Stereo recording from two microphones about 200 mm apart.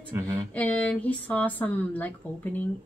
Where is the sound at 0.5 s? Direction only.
5° left (ahead or behind).